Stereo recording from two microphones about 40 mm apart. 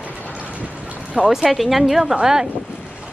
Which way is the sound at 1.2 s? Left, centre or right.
Centre.